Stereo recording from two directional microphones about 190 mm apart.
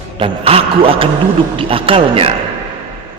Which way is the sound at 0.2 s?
30° right (ahead or behind).